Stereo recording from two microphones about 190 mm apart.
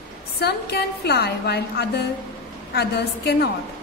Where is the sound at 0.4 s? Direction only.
55° left (ahead or behind).